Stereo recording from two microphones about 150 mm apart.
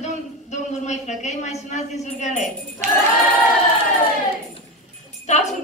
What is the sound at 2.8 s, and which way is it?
Choir, 50° right (ahead or behind).